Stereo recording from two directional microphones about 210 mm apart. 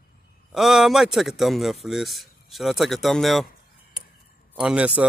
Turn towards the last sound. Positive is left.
turn(degrees=-5)  # may be behind; listen again after turning